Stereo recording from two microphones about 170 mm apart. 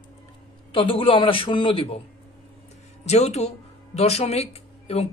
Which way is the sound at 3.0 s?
40° left (ahead or behind).